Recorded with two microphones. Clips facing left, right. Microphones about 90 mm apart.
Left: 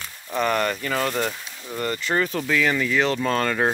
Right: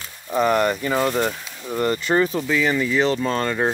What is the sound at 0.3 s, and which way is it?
Speech, 15° right (ahead or behind).